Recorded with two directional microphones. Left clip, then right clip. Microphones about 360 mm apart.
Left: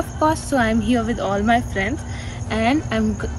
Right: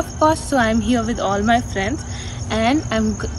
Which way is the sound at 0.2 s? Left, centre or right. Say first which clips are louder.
Right 2 dB; centre.